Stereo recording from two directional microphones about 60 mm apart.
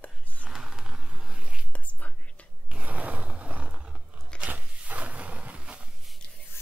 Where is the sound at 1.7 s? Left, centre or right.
Left.